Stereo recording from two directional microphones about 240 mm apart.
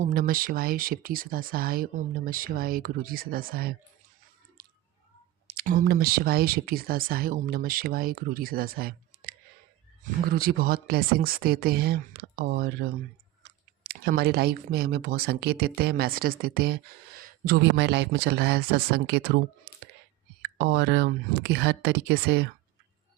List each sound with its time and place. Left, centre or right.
0.0 s speech: right
5.5 s a woman's voice: right